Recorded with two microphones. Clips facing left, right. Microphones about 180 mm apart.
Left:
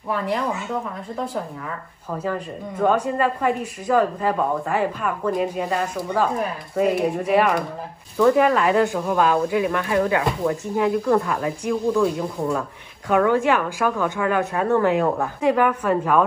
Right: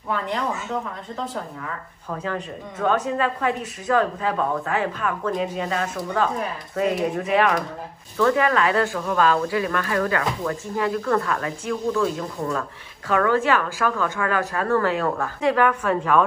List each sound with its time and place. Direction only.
2.0 s speech: 10° left (ahead or behind)